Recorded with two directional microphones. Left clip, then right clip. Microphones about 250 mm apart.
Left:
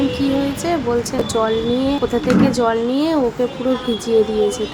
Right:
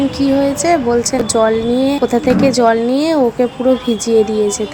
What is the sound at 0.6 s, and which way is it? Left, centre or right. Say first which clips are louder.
Speech: right 6 dB; centre.